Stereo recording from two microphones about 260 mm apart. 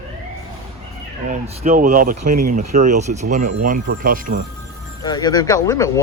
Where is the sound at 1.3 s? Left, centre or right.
Right.